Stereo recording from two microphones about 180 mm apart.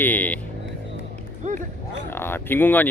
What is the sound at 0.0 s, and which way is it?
Vehicle, 10° left (ahead or behind).